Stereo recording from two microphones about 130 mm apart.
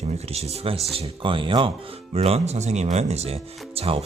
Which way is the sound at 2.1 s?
50° right (ahead or behind).